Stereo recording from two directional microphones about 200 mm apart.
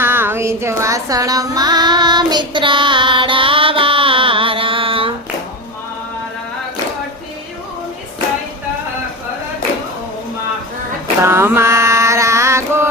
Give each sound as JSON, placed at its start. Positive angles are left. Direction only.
{"t": 0.0, "sound": "female singing", "side_deg": -10}
{"t": 11.2, "sound": "mantra", "side_deg": -10}